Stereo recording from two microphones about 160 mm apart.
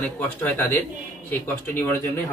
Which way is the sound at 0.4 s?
15° left (ahead or behind).